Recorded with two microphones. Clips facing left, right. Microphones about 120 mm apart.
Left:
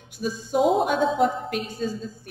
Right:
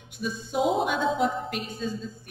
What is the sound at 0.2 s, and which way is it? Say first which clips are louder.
A woman's voice: left 4 dB; 45° left (ahead or behind).